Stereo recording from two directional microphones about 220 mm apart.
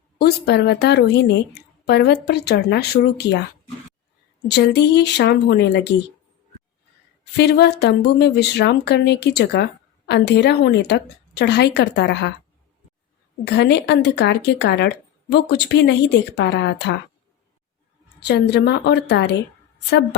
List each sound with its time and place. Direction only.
0.2 s speech: 45° left (ahead or behind)
4.4 s speech: 50° left (ahead or behind)
7.3 s speech: 50° left (ahead or behind)
13.4 s speech: 50° left (ahead or behind)
18.2 s speech: 50° left (ahead or behind)